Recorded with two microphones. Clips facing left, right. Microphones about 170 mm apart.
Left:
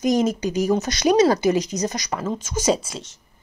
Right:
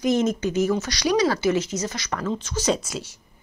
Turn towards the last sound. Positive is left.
turn(degrees=0)  # may be behind; listen again after turning